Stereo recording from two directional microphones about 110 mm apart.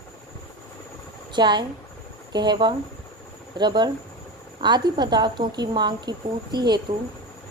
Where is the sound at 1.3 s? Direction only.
45° right (ahead or behind).